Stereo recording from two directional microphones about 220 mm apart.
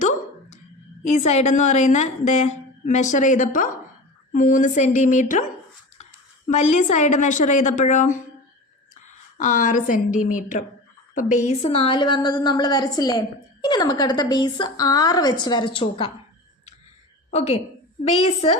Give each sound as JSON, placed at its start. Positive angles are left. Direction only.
{"t": 1.0, "sound": "a woman's voice", "side_deg": 30}
{"t": 6.5, "sound": "a woman's voice", "side_deg": 30}
{"t": 11.4, "sound": "a woman's voice", "side_deg": 25}
{"t": 17.3, "sound": "a woman's voice", "side_deg": 30}